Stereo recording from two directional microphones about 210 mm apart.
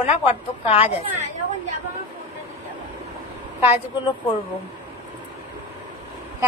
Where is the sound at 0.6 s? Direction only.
30° left (ahead or behind).